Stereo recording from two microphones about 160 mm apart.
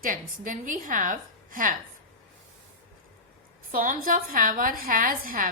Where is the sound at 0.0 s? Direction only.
55° right (ahead or behind).